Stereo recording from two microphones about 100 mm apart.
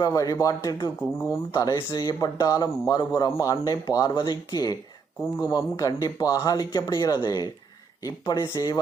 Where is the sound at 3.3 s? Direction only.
35° left (ahead or behind).